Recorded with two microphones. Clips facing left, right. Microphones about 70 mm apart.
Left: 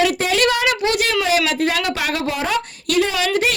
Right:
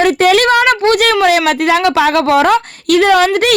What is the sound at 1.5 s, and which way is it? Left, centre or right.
A woman's voice, right.